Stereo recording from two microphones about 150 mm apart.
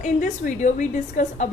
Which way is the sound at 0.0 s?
55° left (ahead or behind).